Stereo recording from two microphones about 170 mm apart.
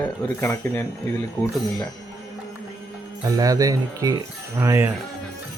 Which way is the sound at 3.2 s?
20° right (ahead or behind).